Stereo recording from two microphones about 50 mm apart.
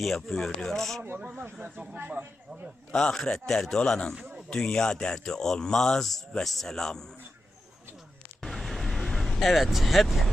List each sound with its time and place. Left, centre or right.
0.0 s speech: centre
1.0 s speech: right
1.6 s speech: right
2.9 s speech: centre
8.4 s vehicle: centre